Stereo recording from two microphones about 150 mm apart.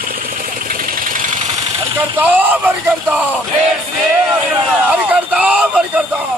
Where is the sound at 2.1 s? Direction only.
10° right (ahead or behind).